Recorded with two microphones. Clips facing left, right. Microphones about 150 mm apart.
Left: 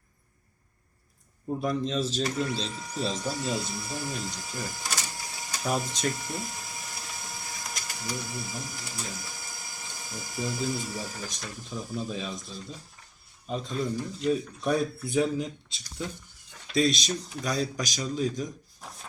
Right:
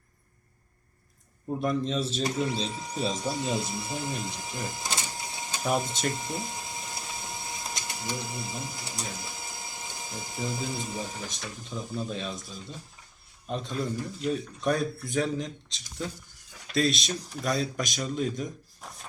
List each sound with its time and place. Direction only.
1.5 s speech: centre (ahead or behind)
2.7 s speech: 25° right (ahead or behind)
6.1 s printer: 20° right (ahead or behind)
11.2 s speech: centre (ahead or behind)
16.6 s a man's voice: centre (ahead or behind)